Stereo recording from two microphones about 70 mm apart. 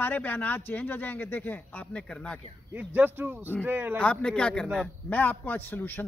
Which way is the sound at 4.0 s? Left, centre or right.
Centre.